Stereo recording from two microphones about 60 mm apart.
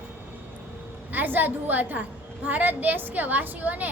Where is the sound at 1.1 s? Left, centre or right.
Right.